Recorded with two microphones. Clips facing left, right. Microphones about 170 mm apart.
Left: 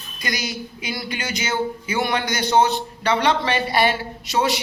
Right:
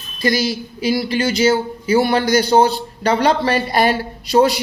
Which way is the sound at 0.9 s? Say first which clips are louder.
Right 12 dB; 30° right (ahead or behind).